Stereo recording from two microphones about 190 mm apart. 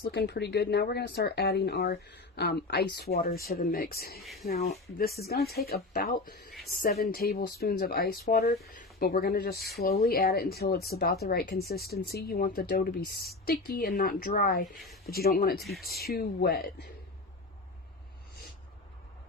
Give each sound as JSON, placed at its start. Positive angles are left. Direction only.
{"t": 0.1, "sound": "speech", "side_deg": 60}
{"t": 4.2, "sound": "speech", "side_deg": 0}
{"t": 4.7, "sound": "speech", "side_deg": 55}
{"t": 14.8, "sound": "speech", "side_deg": 0}
{"t": 15.1, "sound": "speech", "side_deg": 55}
{"t": 15.6, "sound": "speech", "side_deg": 0}
{"t": 15.9, "sound": "speech", "side_deg": 55}